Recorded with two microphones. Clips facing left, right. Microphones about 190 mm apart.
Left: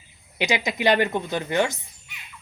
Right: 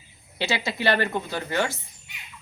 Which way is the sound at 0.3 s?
15° left (ahead or behind).